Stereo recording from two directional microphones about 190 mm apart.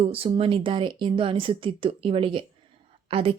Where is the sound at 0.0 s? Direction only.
30° right (ahead or behind).